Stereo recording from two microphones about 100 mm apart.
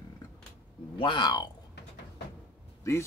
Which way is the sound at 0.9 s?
50° left (ahead or behind).